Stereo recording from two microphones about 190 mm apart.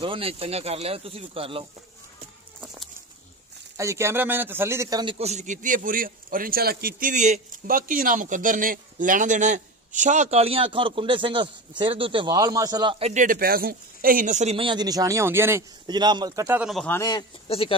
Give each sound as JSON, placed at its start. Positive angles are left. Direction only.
{"t": 0.0, "sound": "a man's voice", "side_deg": -30}
{"t": 3.7, "sound": "a man's voice", "side_deg": -15}
{"t": 5.1, "sound": "a man's voice", "side_deg": -35}
{"t": 13.1, "sound": "speech", "side_deg": -45}
{"t": 16.6, "sound": "a man's voice", "side_deg": 0}
{"t": 16.9, "sound": "a man's voice", "side_deg": 20}
{"t": 17.5, "sound": "speech", "side_deg": 30}